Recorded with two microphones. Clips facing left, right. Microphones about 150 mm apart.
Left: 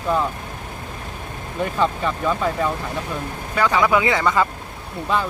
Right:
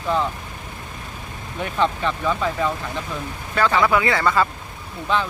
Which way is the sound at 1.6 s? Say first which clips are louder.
Left 1 dB; 5° left (ahead or behind).